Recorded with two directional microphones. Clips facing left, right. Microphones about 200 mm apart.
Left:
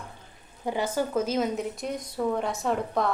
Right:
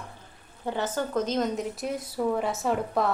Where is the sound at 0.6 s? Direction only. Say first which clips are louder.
Left 2 dB; 10° left (ahead or behind).